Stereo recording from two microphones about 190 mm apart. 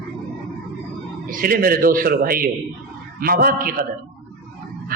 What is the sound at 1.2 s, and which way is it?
A man's voice, 50° right (ahead or behind).